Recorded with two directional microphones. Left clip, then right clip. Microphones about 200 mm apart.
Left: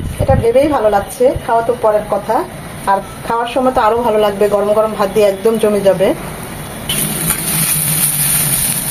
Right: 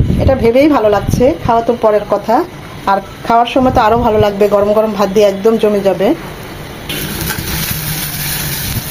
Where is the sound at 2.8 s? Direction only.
35° right (ahead or behind).